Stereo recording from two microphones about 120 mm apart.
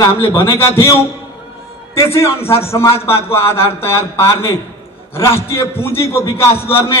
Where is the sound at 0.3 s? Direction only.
20° left (ahead or behind).